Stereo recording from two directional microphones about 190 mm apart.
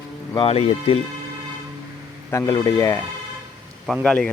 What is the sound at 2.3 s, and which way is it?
Speech, 20° left (ahead or behind).